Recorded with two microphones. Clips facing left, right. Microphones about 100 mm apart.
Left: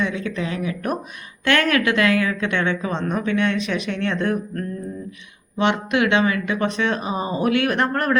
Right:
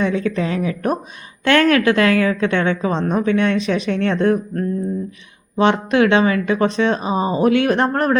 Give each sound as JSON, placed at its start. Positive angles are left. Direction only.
{"t": 0.0, "sound": "a woman's voice", "side_deg": -35}
{"t": 5.5, "sound": "a woman's voice", "side_deg": -35}